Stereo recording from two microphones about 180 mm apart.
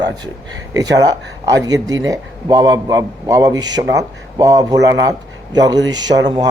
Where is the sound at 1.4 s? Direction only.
20° right (ahead or behind).